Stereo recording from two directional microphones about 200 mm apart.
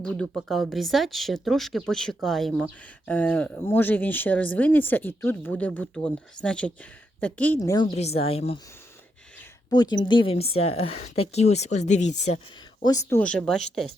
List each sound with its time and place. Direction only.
0.0 s speech: 5° left (ahead or behind)
7.9 s a woman's voice: 30° left (ahead or behind)
9.6 s a woman's voice: 20° left (ahead or behind)
12.8 s speech: 15° left (ahead or behind)